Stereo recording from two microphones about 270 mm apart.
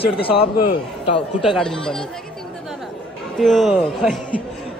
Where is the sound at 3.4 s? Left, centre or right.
Centre.